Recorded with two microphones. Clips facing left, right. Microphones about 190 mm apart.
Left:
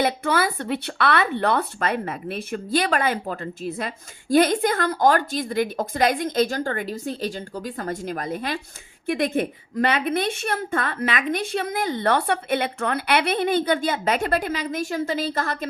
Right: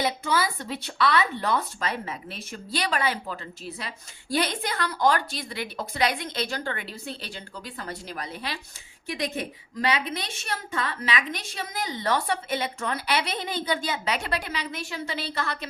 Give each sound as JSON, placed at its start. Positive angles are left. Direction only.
{"t": 0.0, "sound": "speech", "side_deg": 60}